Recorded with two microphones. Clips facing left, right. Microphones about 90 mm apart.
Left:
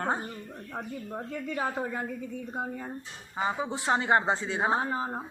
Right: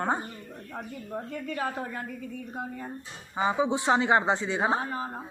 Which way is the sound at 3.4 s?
15° right (ahead or behind).